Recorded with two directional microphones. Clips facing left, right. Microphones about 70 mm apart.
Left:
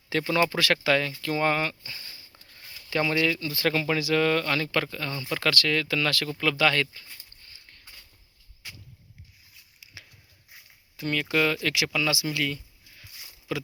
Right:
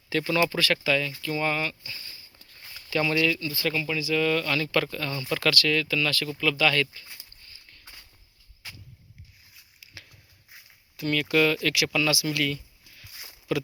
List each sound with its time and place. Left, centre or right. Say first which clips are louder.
0.1 s speech: even; left
3.0 s speech: even; left
3.5 s speech: left 3 dB; left
4.1 s speech: even; left
4.8 s speech: right 1 dB; centre
5.4 s speech: right 1 dB; left
5.9 s speech: even; left
9.8 s a sound: even; centre
10.9 s speech: right 2 dB; left